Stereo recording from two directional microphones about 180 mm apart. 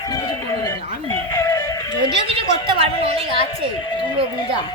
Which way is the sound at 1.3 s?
15° left (ahead or behind).